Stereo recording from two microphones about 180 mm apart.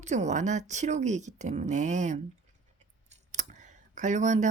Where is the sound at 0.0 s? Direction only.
40° right (ahead or behind).